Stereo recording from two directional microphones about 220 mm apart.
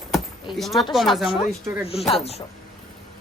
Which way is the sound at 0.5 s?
Centre (ahead or behind).